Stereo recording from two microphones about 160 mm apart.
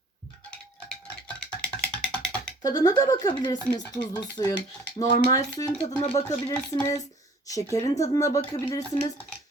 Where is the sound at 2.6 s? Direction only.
25° left (ahead or behind).